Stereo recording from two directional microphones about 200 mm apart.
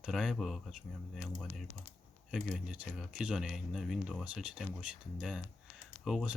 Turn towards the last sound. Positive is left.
turn(degrees=0)  # may be behind; listen again after turning